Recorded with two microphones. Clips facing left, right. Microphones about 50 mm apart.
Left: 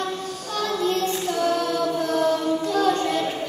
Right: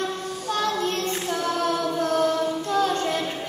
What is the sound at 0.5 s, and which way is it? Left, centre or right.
Child singing, right.